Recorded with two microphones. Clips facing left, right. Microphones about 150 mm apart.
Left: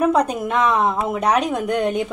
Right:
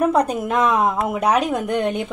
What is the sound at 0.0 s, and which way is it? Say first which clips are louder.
A woman's voice: even; centre (ahead or behind).